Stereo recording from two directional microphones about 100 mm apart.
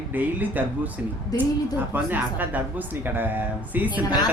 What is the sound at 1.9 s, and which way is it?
Speech, 15° right (ahead or behind).